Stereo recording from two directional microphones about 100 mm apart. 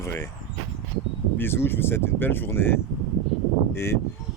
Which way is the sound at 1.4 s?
25° left (ahead or behind).